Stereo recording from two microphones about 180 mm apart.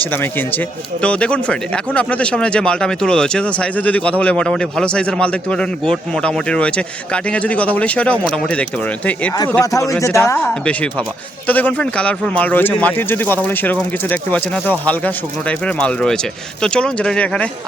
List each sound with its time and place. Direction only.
0.0 s speech: 10° left (ahead or behind)